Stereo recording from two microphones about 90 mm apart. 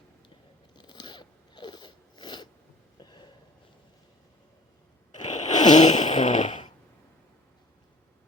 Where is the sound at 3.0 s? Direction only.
55° left (ahead or behind).